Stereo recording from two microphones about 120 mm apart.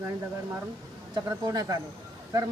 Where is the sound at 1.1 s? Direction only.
35° right (ahead or behind).